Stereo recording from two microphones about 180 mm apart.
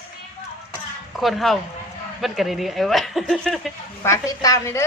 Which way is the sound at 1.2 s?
Centre (ahead or behind).